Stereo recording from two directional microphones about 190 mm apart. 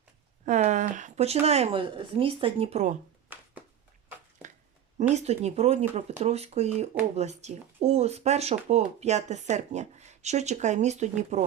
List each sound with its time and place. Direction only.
0.4 s speech: 40° right (ahead or behind)
4.9 s speech: 35° right (ahead or behind)